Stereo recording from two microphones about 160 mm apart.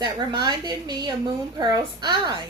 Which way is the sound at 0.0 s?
30° right (ahead or behind).